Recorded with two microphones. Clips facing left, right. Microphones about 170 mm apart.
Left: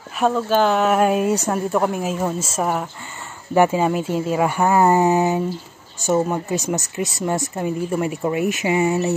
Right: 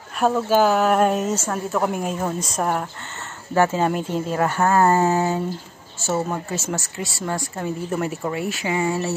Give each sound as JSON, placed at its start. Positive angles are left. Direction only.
{"t": 0.2, "sound": "speech", "side_deg": -5}
{"t": 1.9, "sound": "speech", "side_deg": 0}